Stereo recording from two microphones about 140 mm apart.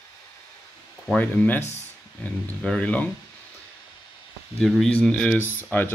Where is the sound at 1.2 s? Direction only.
10° left (ahead or behind).